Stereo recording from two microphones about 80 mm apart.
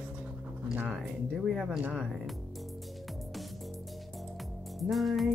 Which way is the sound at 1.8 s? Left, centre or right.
Centre.